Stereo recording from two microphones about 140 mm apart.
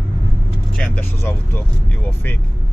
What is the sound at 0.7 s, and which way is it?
Speech, 10° left (ahead or behind).